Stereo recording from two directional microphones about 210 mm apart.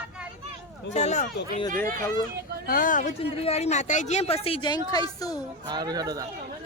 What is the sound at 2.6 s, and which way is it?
Speech, 40° left (ahead or behind).